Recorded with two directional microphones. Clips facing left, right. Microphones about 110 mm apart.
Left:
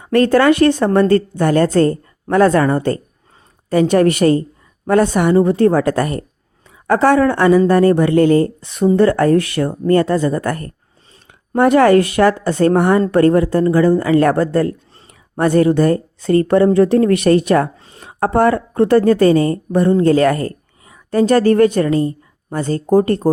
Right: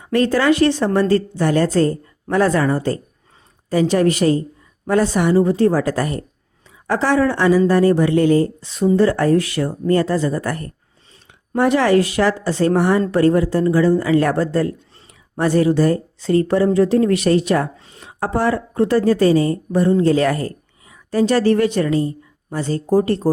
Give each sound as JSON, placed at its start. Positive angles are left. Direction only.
{"t": 0.0, "sound": "a woman's voice", "side_deg": 55}